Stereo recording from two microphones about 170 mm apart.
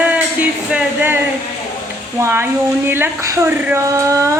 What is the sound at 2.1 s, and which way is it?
Speech, 15° right (ahead or behind).